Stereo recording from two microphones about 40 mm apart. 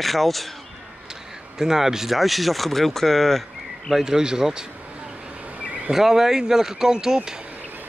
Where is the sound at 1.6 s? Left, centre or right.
Centre.